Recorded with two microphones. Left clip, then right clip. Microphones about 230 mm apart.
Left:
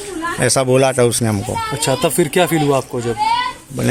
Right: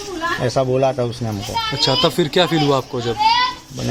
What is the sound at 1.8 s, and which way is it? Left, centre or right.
Speech, centre.